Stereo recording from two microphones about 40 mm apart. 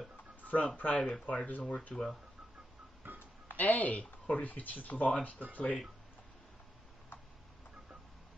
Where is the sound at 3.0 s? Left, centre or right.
Right.